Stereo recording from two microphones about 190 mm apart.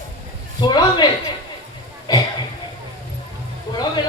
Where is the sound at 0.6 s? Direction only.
20° left (ahead or behind).